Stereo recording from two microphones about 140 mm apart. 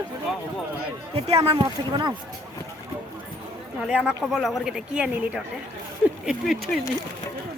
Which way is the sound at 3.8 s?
5° right (ahead or behind).